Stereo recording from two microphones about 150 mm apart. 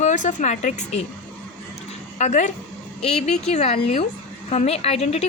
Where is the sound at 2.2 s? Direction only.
55° left (ahead or behind).